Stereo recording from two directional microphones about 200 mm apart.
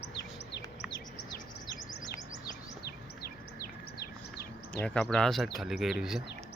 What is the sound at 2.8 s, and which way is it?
Bird, 50° left (ahead or behind).